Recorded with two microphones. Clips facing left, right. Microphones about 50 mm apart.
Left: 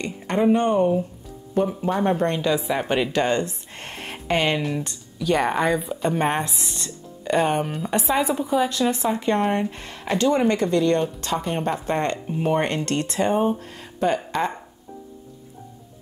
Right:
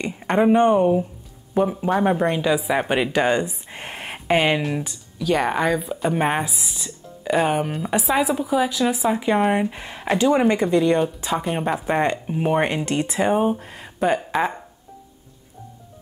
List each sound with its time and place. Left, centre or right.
0.0 s speech: right
4.8 s speech: centre